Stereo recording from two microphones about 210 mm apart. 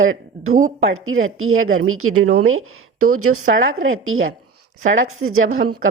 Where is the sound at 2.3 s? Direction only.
80° right.